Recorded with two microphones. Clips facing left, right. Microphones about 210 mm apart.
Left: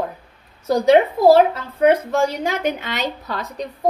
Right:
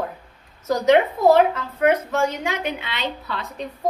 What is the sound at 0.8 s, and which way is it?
A woman's voice, 35° left (ahead or behind).